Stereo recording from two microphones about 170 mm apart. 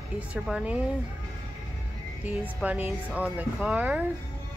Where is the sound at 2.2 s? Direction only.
10° right (ahead or behind).